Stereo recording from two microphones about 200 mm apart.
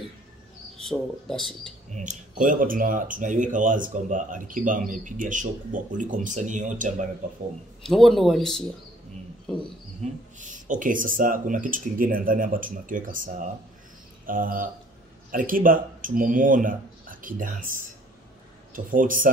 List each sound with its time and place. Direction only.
0.8 s speech: centre (ahead or behind)
1.9 s speech: 40° right (ahead or behind)
7.8 s speech: centre (ahead or behind)
10.0 s speech: 35° right (ahead or behind)